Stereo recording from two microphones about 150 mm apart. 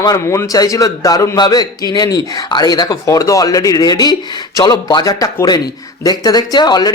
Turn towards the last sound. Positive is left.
turn(degrees=30)  # may be behind; listen again after turning